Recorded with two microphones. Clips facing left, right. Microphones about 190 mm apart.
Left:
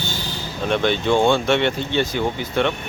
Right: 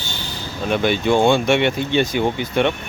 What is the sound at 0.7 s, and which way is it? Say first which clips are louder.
Speech: right 1 dB; 10° right (ahead or behind).